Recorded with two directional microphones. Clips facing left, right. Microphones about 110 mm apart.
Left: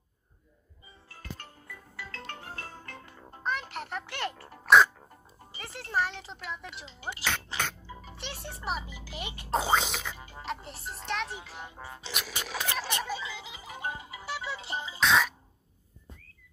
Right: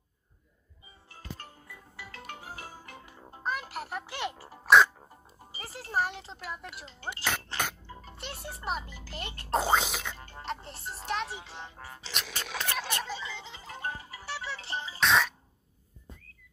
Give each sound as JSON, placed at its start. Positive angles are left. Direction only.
{"t": 1.0, "sound": "music", "side_deg": -20}
{"t": 5.6, "sound": "speech", "side_deg": -35}
{"t": 6.1, "sound": "speech", "side_deg": 0}
{"t": 7.9, "sound": "music", "side_deg": 5}
{"t": 8.6, "sound": "speech", "side_deg": 5}
{"t": 9.7, "sound": "speech", "side_deg": 0}
{"t": 12.1, "sound": "speech", "side_deg": 5}
{"t": 12.9, "sound": "music", "side_deg": 10}
{"t": 15.0, "sound": "music", "side_deg": 0}